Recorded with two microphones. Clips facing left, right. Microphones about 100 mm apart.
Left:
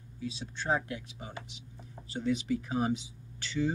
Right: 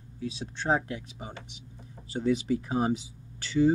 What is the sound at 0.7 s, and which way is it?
Speech, 45° right (ahead or behind).